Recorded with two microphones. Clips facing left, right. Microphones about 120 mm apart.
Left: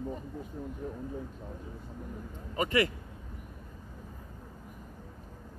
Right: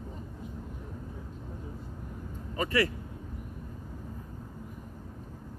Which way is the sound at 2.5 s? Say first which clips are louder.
Even; 20° left (ahead or behind).